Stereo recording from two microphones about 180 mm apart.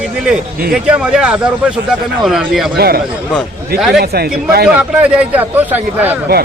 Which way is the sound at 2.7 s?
60° right (ahead or behind).